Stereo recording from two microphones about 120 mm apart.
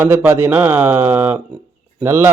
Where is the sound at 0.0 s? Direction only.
15° right (ahead or behind).